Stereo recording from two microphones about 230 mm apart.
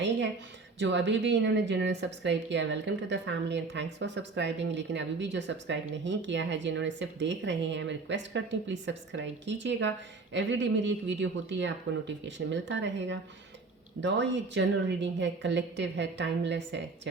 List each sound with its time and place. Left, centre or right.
0.8 s speech: right